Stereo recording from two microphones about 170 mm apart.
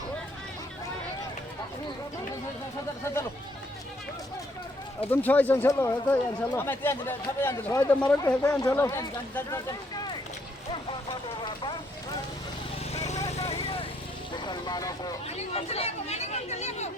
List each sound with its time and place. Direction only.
5.1 s speech: 10° left (ahead or behind)
12.9 s vehicle: 40° left (ahead or behind)
14.3 s speech: 25° left (ahead or behind)
15.5 s speech: 35° left (ahead or behind)